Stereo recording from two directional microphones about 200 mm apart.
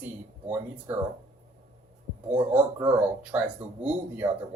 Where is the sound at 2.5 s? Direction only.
5° right (ahead or behind).